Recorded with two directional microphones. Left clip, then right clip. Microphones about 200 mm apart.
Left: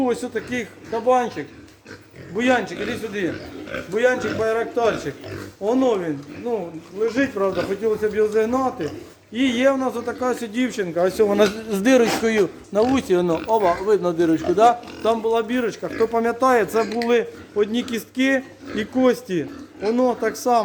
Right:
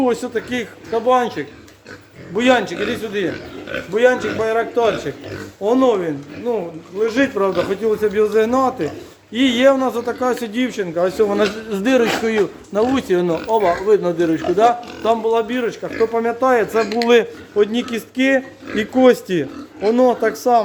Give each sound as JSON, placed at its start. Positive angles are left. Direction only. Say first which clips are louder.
{"t": 0.0, "sound": "a man's voice", "louder": "right 4 dB", "side_deg": -10}
{"t": 2.8, "sound": "a man's voice", "louder": "right 4 dB", "side_deg": -10}
{"t": 10.6, "sound": "speech", "louder": "right 1 dB", "side_deg": 5}
{"t": 17.1, "sound": "speech", "louder": "right 6 dB", "side_deg": -15}
{"t": 17.6, "sound": "speech", "louder": "right 4 dB", "side_deg": 0}
{"t": 18.9, "sound": "speech", "louder": "right 6 dB", "side_deg": -15}